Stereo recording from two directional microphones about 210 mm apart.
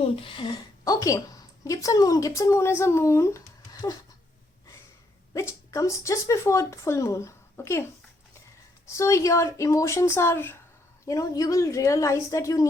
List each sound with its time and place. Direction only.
0.0 s a woman's voice: 25° left (ahead or behind)
5.3 s speech: 15° left (ahead or behind)
8.9 s speech: 15° left (ahead or behind)